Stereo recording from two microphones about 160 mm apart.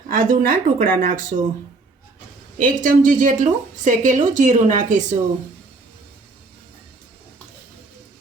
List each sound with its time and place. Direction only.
0.1 s speech: 60° right (ahead or behind)
2.6 s a woman's voice: 55° right (ahead or behind)